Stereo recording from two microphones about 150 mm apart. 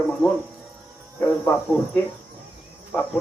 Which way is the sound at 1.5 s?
15° left (ahead or behind).